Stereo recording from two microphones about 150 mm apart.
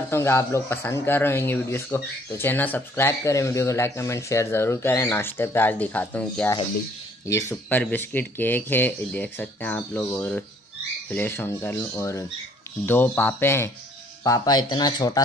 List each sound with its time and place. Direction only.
0.1 s speech: 15° left (ahead or behind)